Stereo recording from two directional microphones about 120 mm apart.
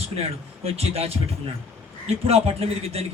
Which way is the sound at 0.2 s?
55° right (ahead or behind).